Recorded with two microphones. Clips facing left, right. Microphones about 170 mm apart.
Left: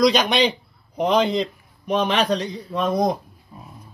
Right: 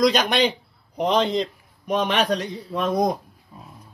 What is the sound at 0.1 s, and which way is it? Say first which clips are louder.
Speech: left 1 dB; 50° right (ahead or behind).